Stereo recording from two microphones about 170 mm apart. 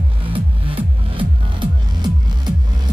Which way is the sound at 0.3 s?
30° right (ahead or behind).